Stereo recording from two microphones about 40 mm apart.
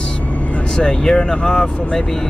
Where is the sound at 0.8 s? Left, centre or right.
Centre.